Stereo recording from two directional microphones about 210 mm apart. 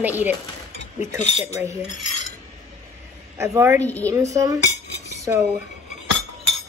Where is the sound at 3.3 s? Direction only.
15° right (ahead or behind).